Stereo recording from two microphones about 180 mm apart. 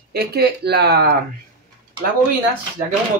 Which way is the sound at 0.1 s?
60° right (ahead or behind).